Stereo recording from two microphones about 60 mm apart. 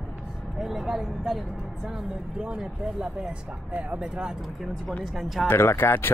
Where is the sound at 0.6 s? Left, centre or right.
Centre.